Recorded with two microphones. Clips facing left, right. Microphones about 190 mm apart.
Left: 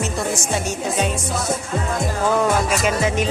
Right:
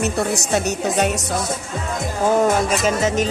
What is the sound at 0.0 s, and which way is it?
Speech, 65° right (ahead or behind).